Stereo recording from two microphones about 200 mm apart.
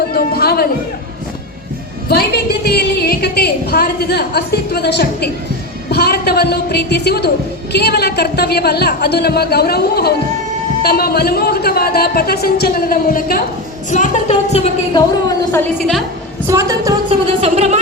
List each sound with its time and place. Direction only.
0.1 s speech: 50° left (ahead or behind)
2.0 s a woman's voice: 55° left (ahead or behind); by 15.0 s 30° left (ahead or behind)
15.8 s a woman's voice: centre (ahead or behind)
16.5 s a woman's voice: 15° right (ahead or behind)
17.1 s speech: 30° right (ahead or behind)